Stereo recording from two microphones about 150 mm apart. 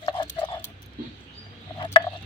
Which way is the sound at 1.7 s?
35° left (ahead or behind).